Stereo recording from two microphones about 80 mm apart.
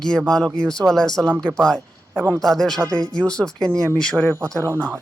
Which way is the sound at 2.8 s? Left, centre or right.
Right.